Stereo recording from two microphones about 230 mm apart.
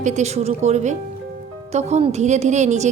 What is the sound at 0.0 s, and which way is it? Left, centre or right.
A woman's voice, right.